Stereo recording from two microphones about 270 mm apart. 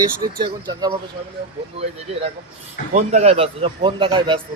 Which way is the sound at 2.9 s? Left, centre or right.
Right.